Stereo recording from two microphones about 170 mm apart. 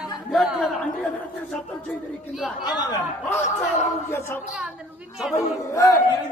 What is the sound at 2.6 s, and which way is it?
Speech, 25° left (ahead or behind).